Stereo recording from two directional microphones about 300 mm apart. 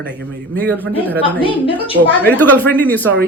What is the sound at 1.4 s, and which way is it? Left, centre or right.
Speech, centre.